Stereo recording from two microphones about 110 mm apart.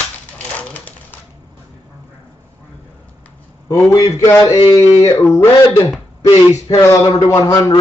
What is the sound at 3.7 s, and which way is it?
A man's voice, 30° left (ahead or behind).